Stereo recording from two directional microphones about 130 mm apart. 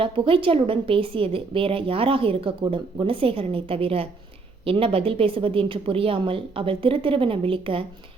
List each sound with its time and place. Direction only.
0.0 s a woman's voice: 45° right (ahead or behind)